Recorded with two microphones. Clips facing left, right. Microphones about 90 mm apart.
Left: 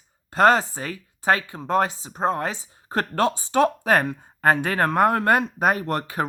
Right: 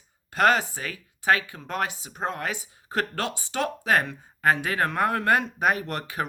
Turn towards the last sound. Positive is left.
turn(degrees=35)  # may be behind; listen again after turning